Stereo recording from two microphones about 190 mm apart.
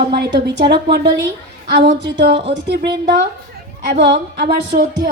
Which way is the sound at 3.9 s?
65° right (ahead or behind).